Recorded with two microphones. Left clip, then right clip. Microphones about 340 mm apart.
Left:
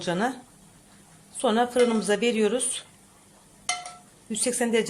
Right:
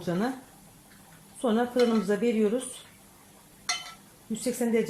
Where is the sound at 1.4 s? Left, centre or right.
Left.